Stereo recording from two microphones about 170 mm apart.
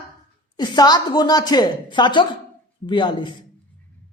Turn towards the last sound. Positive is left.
turn(degrees=25)  # may be behind; listen again after turning